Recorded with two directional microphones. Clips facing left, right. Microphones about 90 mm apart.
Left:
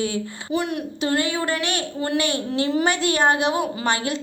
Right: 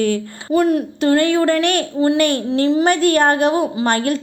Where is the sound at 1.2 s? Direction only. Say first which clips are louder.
Right 9 dB; 50° right (ahead or behind).